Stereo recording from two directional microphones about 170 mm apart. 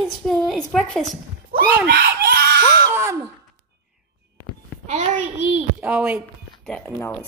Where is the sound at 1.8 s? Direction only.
75° right (ahead or behind).